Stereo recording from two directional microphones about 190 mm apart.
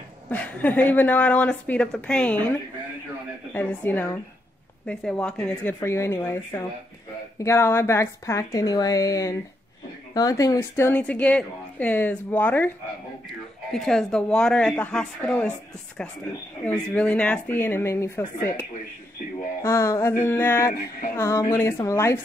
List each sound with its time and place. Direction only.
0.3 s a woman's voice: 10° left (ahead or behind)
3.5 s a woman's voice: 10° left (ahead or behind)
16.6 s a woman's voice: 5° left (ahead or behind)